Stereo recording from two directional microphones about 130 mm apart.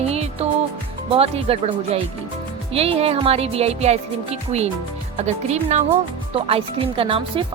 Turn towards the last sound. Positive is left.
turn(degrees=-45)  # may be behind; listen again after turning